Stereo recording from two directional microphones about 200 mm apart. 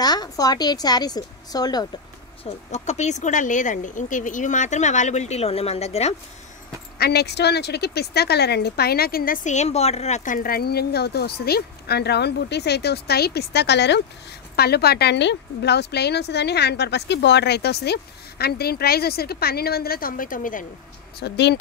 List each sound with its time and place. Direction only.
0.0 s a woman's voice: 20° left (ahead or behind)
2.7 s speech: 35° left (ahead or behind)
7.0 s a woman's voice: 55° left (ahead or behind)
21.2 s a woman's voice: 60° left (ahead or behind)